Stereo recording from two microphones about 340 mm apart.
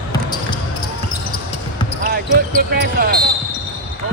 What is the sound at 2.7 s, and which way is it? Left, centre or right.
Speech, right.